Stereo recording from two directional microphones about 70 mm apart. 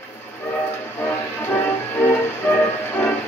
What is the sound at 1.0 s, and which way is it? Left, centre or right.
Music, left.